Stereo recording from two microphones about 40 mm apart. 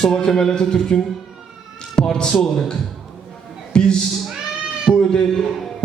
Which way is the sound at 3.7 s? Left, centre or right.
Left.